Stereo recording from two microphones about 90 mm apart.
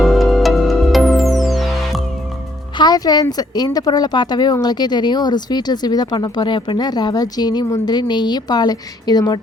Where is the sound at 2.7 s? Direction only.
50° left (ahead or behind).